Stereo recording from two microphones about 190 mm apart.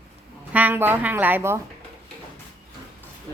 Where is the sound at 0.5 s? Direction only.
10° right (ahead or behind).